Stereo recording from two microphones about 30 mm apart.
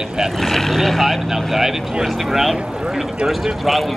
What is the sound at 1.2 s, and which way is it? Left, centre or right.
A man's voice, centre.